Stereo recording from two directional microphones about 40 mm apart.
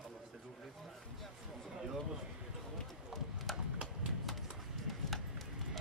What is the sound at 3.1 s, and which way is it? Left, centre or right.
Clip-clop, centre.